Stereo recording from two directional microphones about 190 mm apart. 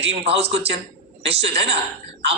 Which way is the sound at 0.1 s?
30° right (ahead or behind).